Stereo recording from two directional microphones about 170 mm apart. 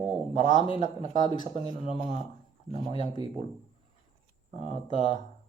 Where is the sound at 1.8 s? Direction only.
35° left (ahead or behind).